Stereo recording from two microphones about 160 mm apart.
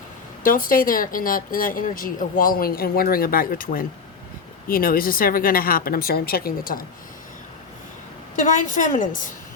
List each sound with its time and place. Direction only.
0.4 s speech: 60° left (ahead or behind)
8.4 s speech: 55° left (ahead or behind)